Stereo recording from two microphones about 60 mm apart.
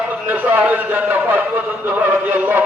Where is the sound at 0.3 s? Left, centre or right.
Right.